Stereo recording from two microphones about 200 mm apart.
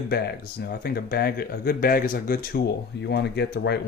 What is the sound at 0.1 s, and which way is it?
Speech, 55° left (ahead or behind).